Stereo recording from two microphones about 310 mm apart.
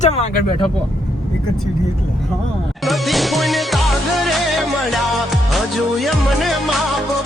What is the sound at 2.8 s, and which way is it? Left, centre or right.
Music, centre.